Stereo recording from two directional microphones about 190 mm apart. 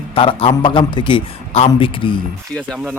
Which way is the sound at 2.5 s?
5° left (ahead or behind).